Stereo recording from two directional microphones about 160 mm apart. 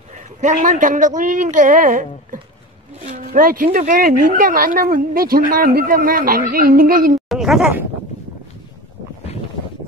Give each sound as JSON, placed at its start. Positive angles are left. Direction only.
{"t": 0.4, "sound": "a woman's voice", "side_deg": -45}
{"t": 3.3, "sound": "a woman's voice", "side_deg": -60}
{"t": 7.2, "sound": "speech", "side_deg": 0}